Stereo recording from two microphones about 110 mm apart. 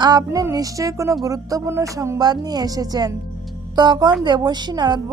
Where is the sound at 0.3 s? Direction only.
25° right (ahead or behind).